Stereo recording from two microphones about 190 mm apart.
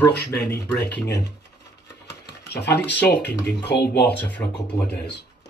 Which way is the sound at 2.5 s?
65° left (ahead or behind).